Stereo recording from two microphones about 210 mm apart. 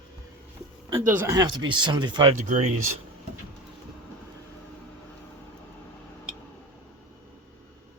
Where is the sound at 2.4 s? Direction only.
35° right (ahead or behind).